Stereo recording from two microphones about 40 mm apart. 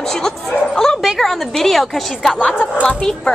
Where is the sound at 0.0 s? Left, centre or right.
Centre.